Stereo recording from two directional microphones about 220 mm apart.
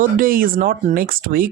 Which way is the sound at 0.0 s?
40° right (ahead or behind).